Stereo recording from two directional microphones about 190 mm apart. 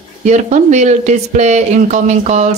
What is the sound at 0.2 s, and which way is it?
Speech, 40° right (ahead or behind).